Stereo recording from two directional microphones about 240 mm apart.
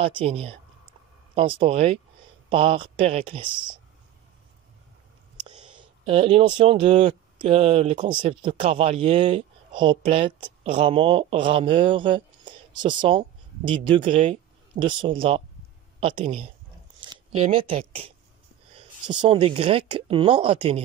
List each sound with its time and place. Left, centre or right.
0.0 s speech: right
5.8 s speech: right